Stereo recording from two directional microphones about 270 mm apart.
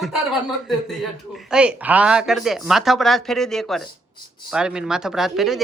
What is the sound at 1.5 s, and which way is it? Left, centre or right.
Speech, centre.